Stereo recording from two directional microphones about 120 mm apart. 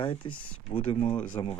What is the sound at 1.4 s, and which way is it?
Speech, 35° left (ahead or behind).